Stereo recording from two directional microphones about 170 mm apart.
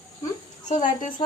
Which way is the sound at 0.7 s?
45° left (ahead or behind).